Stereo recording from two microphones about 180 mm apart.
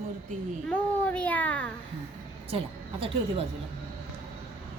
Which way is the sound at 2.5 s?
30° right (ahead or behind).